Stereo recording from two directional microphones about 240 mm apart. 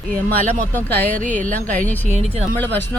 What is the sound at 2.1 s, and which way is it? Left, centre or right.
Speech, right.